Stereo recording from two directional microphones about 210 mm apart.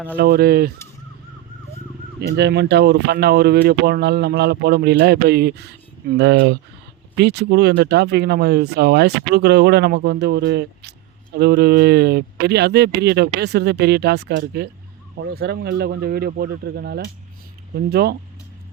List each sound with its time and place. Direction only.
0.2 s speech: 50° right (ahead or behind)
2.3 s speech: 55° right (ahead or behind)